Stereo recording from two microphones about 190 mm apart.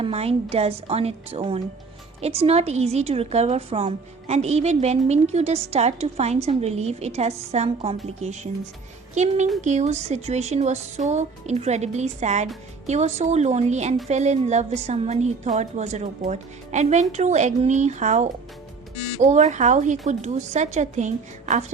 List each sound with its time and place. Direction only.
0.0 s a woman's voice: 30° right (ahead or behind)